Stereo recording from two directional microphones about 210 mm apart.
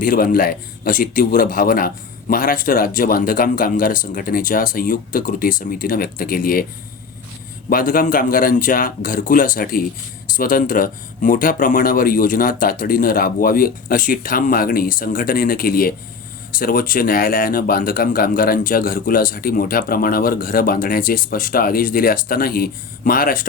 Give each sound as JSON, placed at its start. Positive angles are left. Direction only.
{"t": 0.0, "sound": "speech", "side_deg": 40}
{"t": 7.7, "sound": "speech", "side_deg": 40}